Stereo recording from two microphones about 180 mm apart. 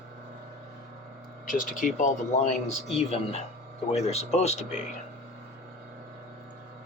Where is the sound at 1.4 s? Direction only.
50° left (ahead or behind).